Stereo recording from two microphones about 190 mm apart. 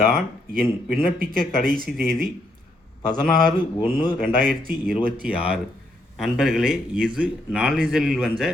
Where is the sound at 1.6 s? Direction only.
50° right (ahead or behind).